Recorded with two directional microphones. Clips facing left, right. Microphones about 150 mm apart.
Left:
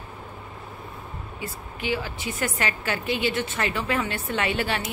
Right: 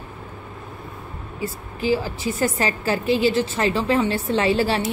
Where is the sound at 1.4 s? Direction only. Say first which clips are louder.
Right 7 dB; 35° right (ahead or behind).